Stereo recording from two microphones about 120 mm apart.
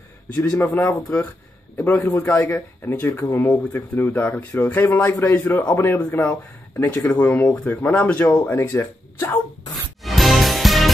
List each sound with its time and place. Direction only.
0.6 s speech: 20° left (ahead or behind)
10.0 s music: centre (ahead or behind)